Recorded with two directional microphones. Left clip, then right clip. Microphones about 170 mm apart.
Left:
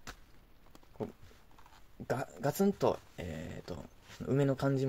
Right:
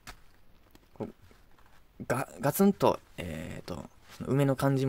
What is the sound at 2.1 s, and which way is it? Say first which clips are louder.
Speech: right 4 dB; 40° right (ahead or behind).